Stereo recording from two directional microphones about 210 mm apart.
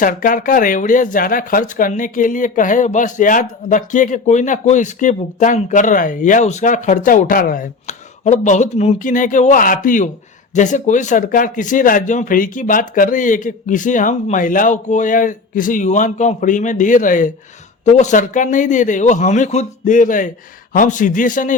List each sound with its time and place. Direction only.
0.0 s speech: 40° left (ahead or behind)